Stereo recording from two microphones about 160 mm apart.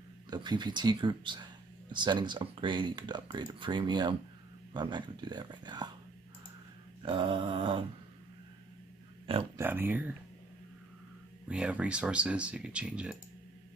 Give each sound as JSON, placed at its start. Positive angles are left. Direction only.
{"t": 0.3, "sound": "speech", "side_deg": -25}
{"t": 7.0, "sound": "a sound", "side_deg": -30}
{"t": 9.6, "sound": "speech", "side_deg": -10}
{"t": 11.4, "sound": "speech", "side_deg": -5}